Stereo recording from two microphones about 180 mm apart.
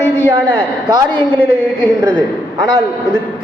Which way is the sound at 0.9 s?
20° right (ahead or behind).